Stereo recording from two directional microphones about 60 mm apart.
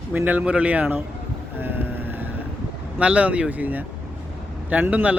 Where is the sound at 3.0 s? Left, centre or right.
Right.